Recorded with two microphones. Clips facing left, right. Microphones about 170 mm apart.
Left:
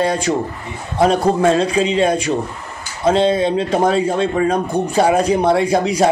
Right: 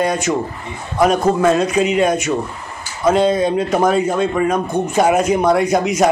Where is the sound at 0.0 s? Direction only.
30° left (ahead or behind).